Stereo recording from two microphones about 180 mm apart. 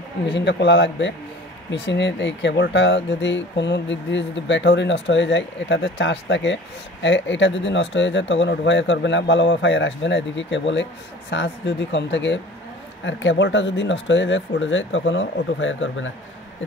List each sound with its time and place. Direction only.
0.3 s speech: 75° left (ahead or behind)
1.7 s speech: 75° left (ahead or behind)